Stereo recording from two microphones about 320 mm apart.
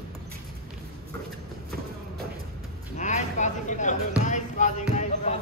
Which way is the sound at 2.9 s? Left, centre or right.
Left.